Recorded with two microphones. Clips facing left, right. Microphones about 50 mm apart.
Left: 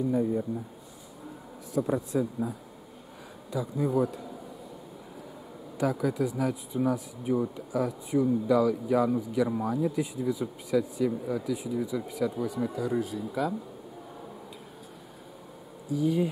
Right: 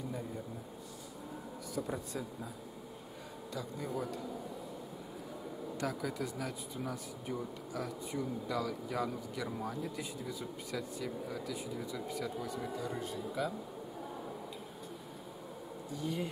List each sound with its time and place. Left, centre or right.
0.1 s speech: centre
1.8 s speech: left
3.5 s speech: centre
5.8 s speech: centre
15.9 s speech: centre